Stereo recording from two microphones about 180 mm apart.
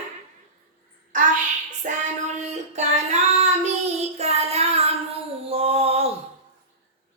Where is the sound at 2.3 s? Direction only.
40° right (ahead or behind).